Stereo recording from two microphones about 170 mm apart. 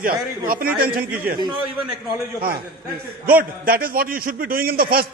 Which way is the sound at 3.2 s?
60° right (ahead or behind).